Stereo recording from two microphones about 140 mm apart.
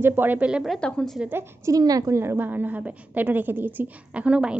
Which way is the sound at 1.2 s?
15° right (ahead or behind).